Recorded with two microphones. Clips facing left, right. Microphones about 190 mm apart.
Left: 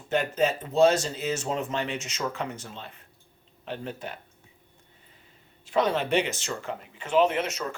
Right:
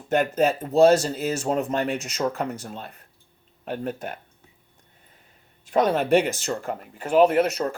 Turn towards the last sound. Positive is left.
turn(degrees=-40)  # may be behind; listen again after turning